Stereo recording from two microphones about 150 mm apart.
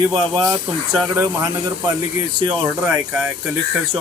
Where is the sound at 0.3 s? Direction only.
25° right (ahead or behind).